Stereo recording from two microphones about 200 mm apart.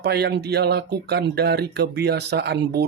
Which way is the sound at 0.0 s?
55° right (ahead or behind).